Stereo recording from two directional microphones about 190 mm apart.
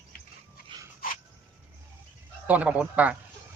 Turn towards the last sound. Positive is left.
turn(degrees=-5)  # may be behind; listen again after turning